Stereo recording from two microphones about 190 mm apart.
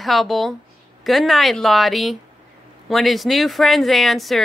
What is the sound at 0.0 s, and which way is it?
Speech, centre (ahead or behind).